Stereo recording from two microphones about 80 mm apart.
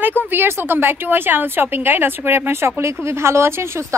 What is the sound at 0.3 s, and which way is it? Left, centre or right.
A woman's voice, right.